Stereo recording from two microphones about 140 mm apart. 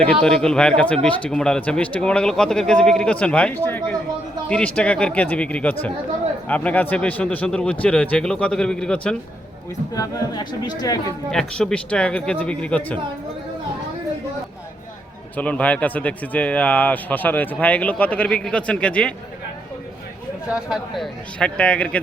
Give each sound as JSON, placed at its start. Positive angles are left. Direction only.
{"t": 0.1, "sound": "speech", "side_deg": 5}
{"t": 9.9, "sound": "speech", "side_deg": 25}
{"t": 11.3, "sound": "speech", "side_deg": 5}
{"t": 15.4, "sound": "speech", "side_deg": 10}
{"t": 20.5, "sound": "speech", "side_deg": -5}